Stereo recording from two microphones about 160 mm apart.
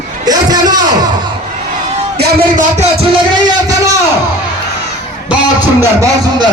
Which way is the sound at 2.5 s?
45° right (ahead or behind).